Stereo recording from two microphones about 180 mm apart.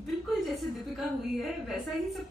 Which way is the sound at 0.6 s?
Centre (ahead or behind).